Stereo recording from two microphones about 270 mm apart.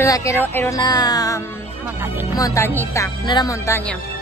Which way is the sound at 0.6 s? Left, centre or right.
Centre.